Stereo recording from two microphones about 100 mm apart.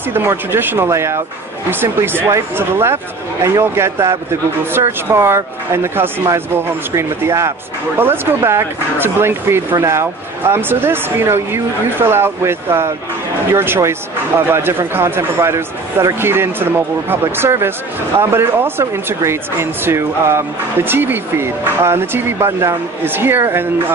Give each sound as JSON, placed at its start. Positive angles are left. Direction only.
{"t": 0.1, "sound": "speech", "side_deg": -25}